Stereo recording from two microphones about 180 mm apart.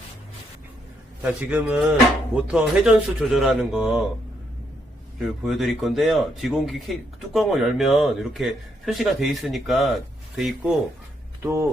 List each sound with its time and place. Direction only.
1.2 s a man's voice: 10° right (ahead or behind)
5.2 s a man's voice: centre (ahead or behind)
11.4 s speech: 15° right (ahead or behind)